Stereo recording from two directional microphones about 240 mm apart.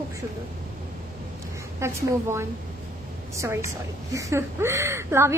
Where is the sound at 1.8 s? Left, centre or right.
Centre.